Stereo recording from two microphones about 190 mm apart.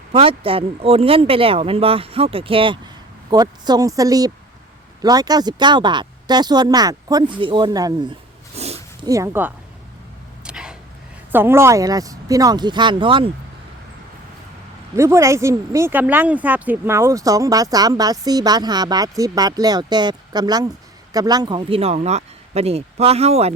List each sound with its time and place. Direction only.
0.1 s speech: 30° right (ahead or behind)
8.5 s dog: 35° right (ahead or behind)
9.0 s speech: 15° right (ahead or behind)
10.4 s a sound: 5° right (ahead or behind)
11.3 s speech: 10° right (ahead or behind); by 13.3 s 25° right (ahead or behind)
14.9 s speech: 15° right (ahead or behind); by 23.6 s 35° right (ahead or behind)